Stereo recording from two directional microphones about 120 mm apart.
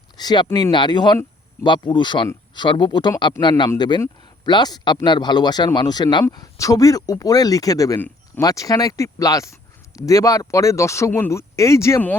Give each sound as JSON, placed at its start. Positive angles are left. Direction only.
{"t": 0.2, "sound": "speech", "side_deg": 35}